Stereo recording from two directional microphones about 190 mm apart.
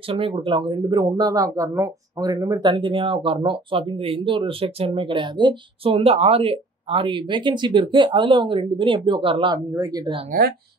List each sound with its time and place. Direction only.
0.1 s speech: 25° right (ahead or behind)